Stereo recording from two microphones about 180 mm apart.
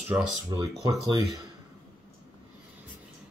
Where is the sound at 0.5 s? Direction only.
20° right (ahead or behind).